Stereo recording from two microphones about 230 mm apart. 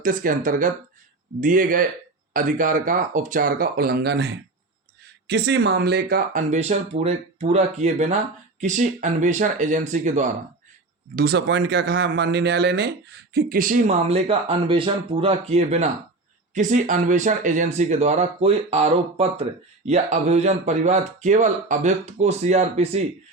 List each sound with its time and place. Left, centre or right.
0.0 s speech: right
11.1 s speech: right